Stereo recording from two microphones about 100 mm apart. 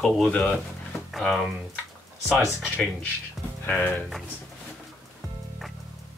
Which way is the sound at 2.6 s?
10° left (ahead or behind).